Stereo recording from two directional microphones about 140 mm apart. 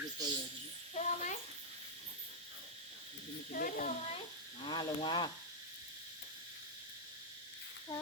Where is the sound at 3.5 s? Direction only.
85° left.